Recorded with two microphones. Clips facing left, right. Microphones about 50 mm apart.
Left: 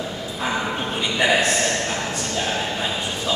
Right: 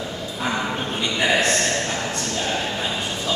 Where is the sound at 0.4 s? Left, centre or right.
Centre.